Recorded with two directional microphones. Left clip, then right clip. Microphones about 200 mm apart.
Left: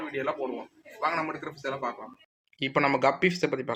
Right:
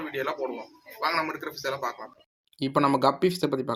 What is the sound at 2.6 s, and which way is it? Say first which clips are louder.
Speech: right 1 dB; 35° right (ahead or behind).